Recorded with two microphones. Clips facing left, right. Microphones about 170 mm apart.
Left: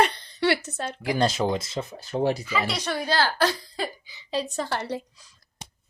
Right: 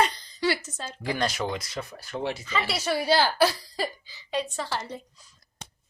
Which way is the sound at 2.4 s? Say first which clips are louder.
Left 2 dB; 10° left (ahead or behind).